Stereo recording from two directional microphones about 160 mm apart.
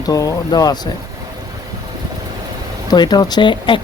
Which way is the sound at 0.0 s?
20° left (ahead or behind).